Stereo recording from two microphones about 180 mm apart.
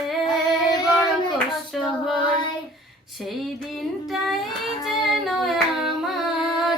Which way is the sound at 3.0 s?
Centre (ahead or behind).